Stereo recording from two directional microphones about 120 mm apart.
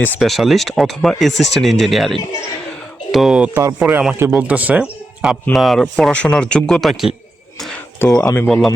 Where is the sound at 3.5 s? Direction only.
30° right (ahead or behind).